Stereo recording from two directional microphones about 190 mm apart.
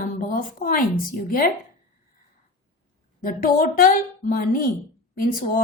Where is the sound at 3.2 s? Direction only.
50° left (ahead or behind).